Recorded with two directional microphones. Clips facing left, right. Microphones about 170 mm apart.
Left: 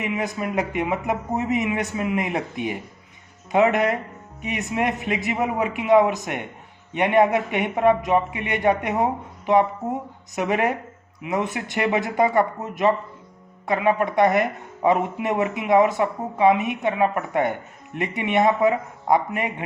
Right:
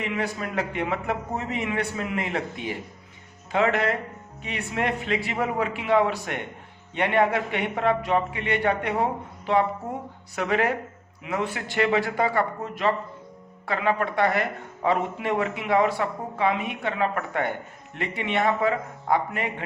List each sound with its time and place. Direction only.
0.0 s a man's voice: 15° left (ahead or behind)
10.3 s a man's voice: 20° left (ahead or behind)